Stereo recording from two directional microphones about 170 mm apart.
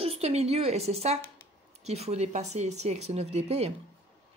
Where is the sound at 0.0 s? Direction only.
35° right (ahead or behind).